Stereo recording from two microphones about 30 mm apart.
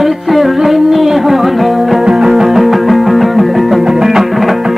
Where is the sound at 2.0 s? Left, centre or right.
Centre.